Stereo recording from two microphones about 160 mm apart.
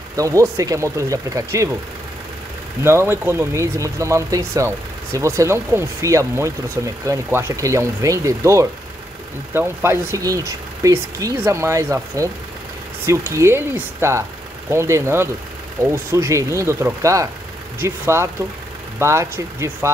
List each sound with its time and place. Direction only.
0.1 s speech: 20° right (ahead or behind)
2.8 s speech: 15° right (ahead or behind)